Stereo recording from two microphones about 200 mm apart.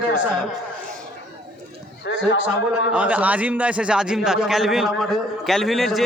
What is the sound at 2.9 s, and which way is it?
A man's voice, 5° right (ahead or behind).